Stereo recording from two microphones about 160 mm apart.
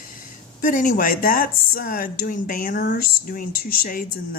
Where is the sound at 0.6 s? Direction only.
55° left (ahead or behind).